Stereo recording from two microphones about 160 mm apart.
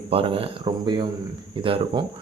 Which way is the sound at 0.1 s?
35° right (ahead or behind).